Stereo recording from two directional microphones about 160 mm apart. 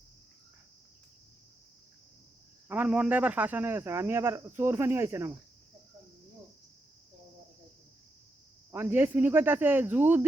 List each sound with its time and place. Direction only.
2.6 s speech: 10° right (ahead or behind)
8.7 s speech: 10° right (ahead or behind)